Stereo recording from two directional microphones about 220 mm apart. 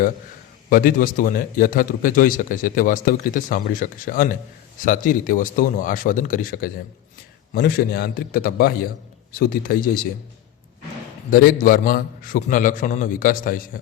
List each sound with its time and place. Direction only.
0.7 s a man's voice: 40° left (ahead or behind)
11.3 s a man's voice: 40° left (ahead or behind)